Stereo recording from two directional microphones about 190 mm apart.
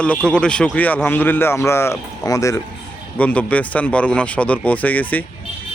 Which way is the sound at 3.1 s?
5° left (ahead or behind).